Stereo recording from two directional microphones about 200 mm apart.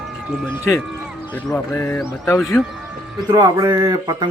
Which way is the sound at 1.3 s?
10° left (ahead or behind).